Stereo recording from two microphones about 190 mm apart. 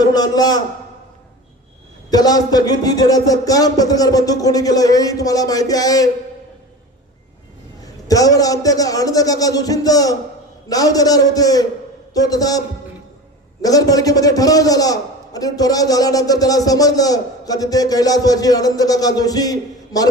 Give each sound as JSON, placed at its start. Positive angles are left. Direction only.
{"t": 0.0, "sound": "a man's voice", "side_deg": 20}
{"t": 2.0, "sound": "a man's voice", "side_deg": 20}
{"t": 8.0, "sound": "a man's voice", "side_deg": 20}